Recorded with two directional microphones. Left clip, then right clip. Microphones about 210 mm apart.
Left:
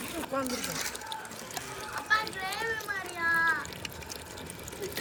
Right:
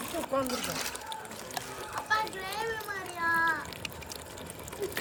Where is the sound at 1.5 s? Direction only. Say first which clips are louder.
Even; 35° right (ahead or behind).